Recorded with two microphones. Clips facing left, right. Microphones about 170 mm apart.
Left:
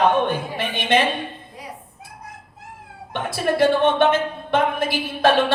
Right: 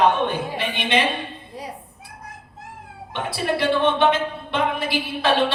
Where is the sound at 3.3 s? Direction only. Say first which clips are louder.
Left 4 dB; 45° left (ahead or behind).